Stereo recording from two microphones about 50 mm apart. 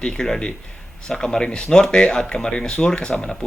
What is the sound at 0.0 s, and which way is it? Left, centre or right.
Speech, centre.